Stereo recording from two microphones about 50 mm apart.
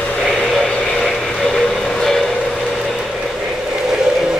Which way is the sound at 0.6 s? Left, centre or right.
Centre.